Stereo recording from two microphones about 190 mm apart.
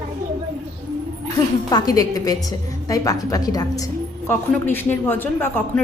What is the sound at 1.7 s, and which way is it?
A woman's voice, 20° left (ahead or behind).